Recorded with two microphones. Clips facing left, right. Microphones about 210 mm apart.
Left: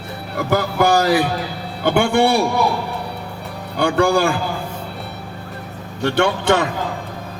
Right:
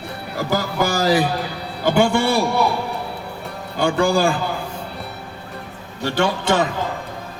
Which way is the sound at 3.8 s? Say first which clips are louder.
Left 1 dB; 60° left (ahead or behind).